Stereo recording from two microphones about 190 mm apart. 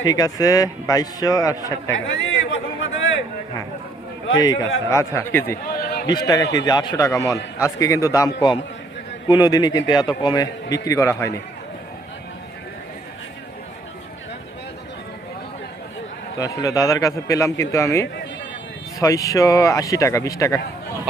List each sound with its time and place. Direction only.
0.0 s a man's voice: 20° left (ahead or behind)
2.0 s a sound: 80° left
4.9 s a man's voice: 15° left (ahead or behind)
5.6 s a sound: 55° left (ahead or behind)
6.2 s a man's voice: 20° left (ahead or behind)
16.4 s a man's voice: 20° left (ahead or behind)